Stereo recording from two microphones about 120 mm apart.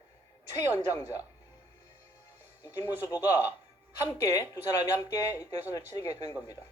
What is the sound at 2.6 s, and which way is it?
Speech, 25° left (ahead or behind).